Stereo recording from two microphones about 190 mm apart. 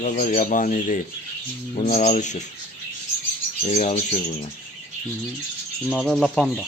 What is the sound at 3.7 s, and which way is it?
Speech, 35° left (ahead or behind).